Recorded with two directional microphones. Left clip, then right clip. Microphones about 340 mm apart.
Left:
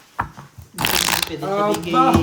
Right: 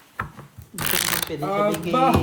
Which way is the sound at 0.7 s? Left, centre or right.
Centre.